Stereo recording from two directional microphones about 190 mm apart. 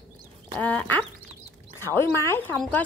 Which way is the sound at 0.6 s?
5° left (ahead or behind).